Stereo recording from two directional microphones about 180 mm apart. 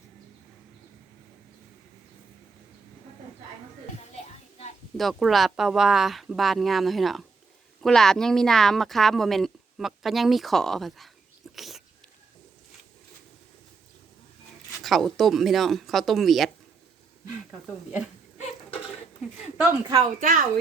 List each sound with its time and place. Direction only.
4.9 s speech: centre (ahead or behind)
11.5 s a sound: centre (ahead or behind)
14.8 s speech: centre (ahead or behind)
19.5 s a woman's voice: 10° right (ahead or behind)
20.0 s speech: 45° right (ahead or behind)